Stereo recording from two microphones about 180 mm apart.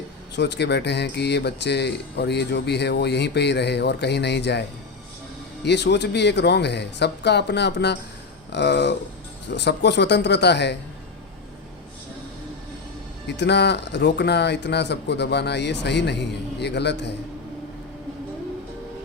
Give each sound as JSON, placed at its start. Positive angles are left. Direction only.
{"t": 0.3, "sound": "speech", "side_deg": 70}
{"t": 5.6, "sound": "speech", "side_deg": 70}
{"t": 13.2, "sound": "speech", "side_deg": 70}